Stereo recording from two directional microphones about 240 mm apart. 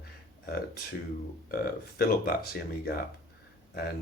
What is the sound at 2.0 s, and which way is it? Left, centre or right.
Speech, left.